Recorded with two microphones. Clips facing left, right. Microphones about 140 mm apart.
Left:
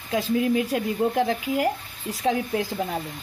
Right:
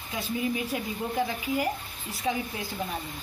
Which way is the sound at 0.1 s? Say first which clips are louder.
Left 8 dB; 85° left.